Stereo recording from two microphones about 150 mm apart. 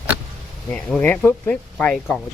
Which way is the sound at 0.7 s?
10° left (ahead or behind).